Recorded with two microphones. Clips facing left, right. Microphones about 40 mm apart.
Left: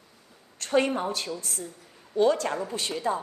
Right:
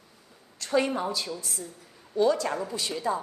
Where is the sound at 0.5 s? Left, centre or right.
Left.